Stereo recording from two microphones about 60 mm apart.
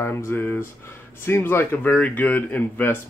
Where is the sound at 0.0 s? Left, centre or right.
Left.